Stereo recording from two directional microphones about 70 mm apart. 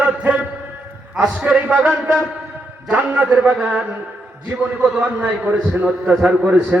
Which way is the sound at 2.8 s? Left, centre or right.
Right.